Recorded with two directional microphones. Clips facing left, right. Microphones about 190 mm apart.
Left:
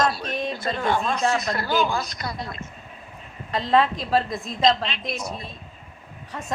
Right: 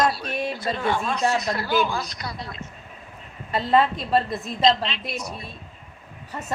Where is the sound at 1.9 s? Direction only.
50° left (ahead or behind).